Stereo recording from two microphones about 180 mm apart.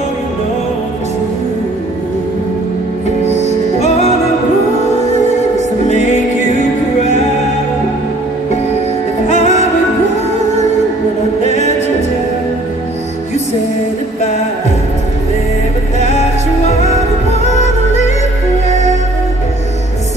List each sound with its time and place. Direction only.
3.3 s music: 40° left (ahead or behind)
5.9 s music: 40° left (ahead or behind)
9.3 s music: 40° left (ahead or behind)
16.0 s music: 40° left (ahead or behind)